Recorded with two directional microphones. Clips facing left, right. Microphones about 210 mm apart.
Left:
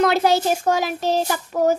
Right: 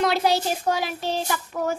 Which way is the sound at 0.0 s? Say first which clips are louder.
Left 4 dB; 50° left (ahead or behind).